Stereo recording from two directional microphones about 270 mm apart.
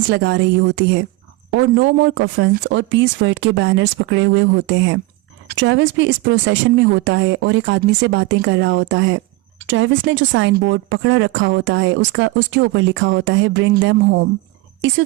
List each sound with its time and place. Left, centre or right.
0.1 s speech: right